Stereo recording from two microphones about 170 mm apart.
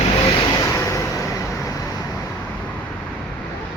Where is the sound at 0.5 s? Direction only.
15° left (ahead or behind).